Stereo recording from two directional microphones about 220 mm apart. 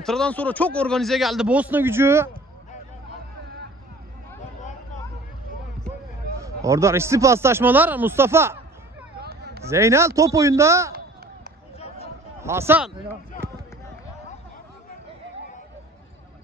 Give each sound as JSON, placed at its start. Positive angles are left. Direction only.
{"t": 0.0, "sound": "a man's voice", "side_deg": 5}
{"t": 6.4, "sound": "speech", "side_deg": -15}
{"t": 9.2, "sound": "a sound", "side_deg": -45}
{"t": 9.7, "sound": "speech", "side_deg": -15}
{"t": 12.4, "sound": "speech", "side_deg": -10}